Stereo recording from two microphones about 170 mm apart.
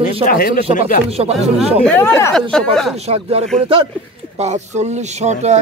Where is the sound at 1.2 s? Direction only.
30° right (ahead or behind).